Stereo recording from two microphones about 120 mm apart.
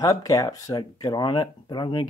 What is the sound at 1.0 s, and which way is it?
Speech, 40° left (ahead or behind).